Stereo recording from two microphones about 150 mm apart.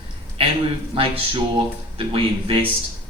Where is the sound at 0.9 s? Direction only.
35° right (ahead or behind).